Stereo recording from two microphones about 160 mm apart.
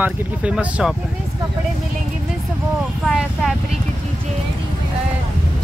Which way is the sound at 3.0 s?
Centre (ahead or behind).